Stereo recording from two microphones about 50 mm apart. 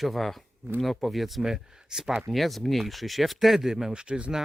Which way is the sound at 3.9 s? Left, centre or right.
Right.